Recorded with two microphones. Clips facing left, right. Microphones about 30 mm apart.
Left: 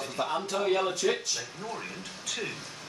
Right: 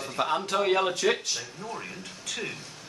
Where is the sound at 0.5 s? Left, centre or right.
Right.